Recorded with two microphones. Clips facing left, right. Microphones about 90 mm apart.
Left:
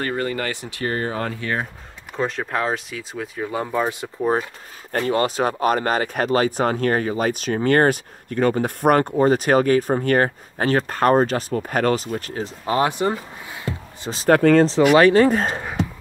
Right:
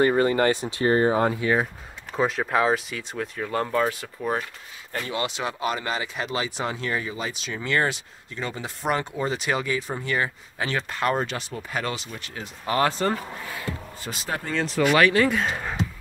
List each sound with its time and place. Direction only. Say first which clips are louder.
0.0 s speech: right 5 dB; 20° right (ahead or behind); by 3.8 s 10° left (ahead or behind)
3.8 s speech: left 3 dB; 20° left (ahead or behind)
4.9 s speech: left 9 dB; 45° left (ahead or behind)
12.6 s speech: left 2 dB; 20° left (ahead or behind)
14.3 s speech: left 16 dB; 60° left (ahead or behind)
15.0 s speech: left 6 dB; 35° left (ahead or behind)